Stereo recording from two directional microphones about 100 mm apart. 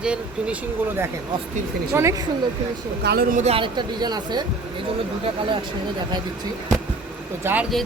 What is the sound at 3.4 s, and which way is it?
Speech, 60° right (ahead or behind).